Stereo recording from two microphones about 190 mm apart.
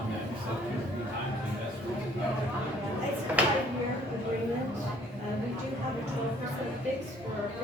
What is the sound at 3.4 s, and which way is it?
Speech, 5° right (ahead or behind).